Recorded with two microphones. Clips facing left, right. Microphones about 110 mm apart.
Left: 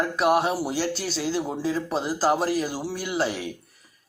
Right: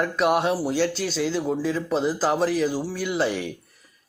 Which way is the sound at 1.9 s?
5° left (ahead or behind).